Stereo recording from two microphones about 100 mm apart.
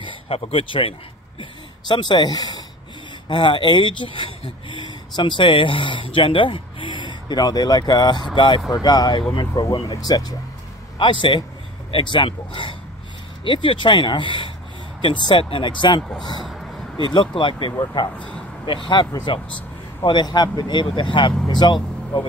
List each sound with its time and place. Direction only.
0.0 s speech: 70° left (ahead or behind)
1.4 s speech: 50° left (ahead or behind)
3.3 s speech: 55° left (ahead or behind)
8.7 s speech: 40° left (ahead or behind)
11.0 s speech: 55° left (ahead or behind)
16.0 s speech: 5° left (ahead or behind)
16.4 s a sound: centre (ahead or behind)
17.0 s speech: 55° left (ahead or behind)
17.7 s speech: 45° left (ahead or behind)
18.1 s speech: 15° left (ahead or behind)
18.7 s speech: 55° left (ahead or behind)